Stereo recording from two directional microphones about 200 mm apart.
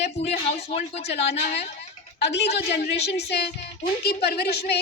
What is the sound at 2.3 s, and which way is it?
Speech, 60° left (ahead or behind).